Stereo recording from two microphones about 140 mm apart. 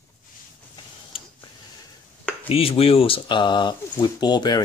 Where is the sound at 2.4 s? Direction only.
45° left (ahead or behind).